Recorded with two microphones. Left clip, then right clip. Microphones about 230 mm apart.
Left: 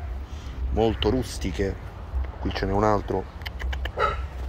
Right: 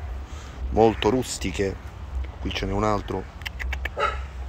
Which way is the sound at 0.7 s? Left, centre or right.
Centre.